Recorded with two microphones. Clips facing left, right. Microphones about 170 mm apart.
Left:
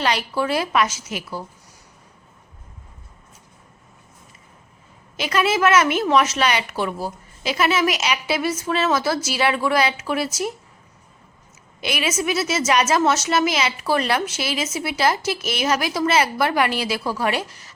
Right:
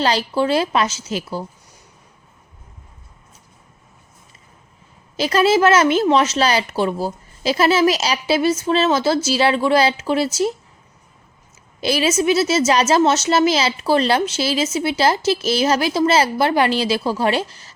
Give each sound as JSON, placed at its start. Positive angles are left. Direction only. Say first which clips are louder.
{"t": 0.0, "sound": "a woman's voice", "louder": "right 4 dB", "side_deg": -30}
{"t": 5.1, "sound": "a woman's voice", "louder": "right 5 dB", "side_deg": -30}
{"t": 11.8, "sound": "a woman's voice", "louder": "right 6 dB", "side_deg": -30}